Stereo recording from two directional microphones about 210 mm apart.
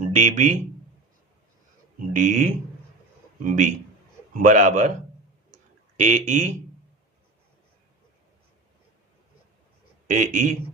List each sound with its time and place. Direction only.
0.0 s speech: 35° right (ahead or behind)
2.0 s a man's voice: 35° right (ahead or behind)
6.0 s a man's voice: 35° right (ahead or behind)
10.1 s a man's voice: 40° right (ahead or behind)